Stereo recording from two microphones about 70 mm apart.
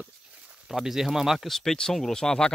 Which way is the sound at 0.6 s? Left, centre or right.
Centre.